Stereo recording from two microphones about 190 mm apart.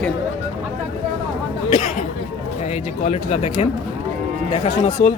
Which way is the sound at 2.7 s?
35° left (ahead or behind).